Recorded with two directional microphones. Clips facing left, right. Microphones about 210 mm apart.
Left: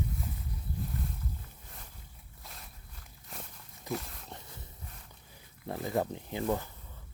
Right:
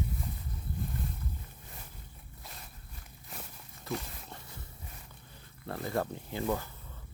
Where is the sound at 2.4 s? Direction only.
Centre (ahead or behind).